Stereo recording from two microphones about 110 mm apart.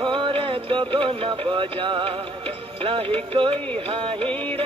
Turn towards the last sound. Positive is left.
turn(degrees=-55)  # may be behind; listen again after turning